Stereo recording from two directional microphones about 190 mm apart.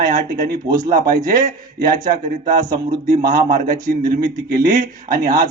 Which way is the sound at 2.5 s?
20° right (ahead or behind).